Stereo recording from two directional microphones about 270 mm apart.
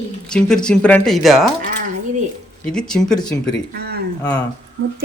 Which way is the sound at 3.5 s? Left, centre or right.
Right.